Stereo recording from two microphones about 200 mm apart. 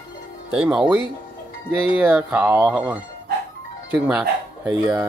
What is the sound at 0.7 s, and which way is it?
Speech, 5° right (ahead or behind).